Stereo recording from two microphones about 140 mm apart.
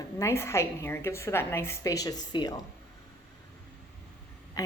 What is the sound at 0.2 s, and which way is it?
A woman's voice, 20° left (ahead or behind).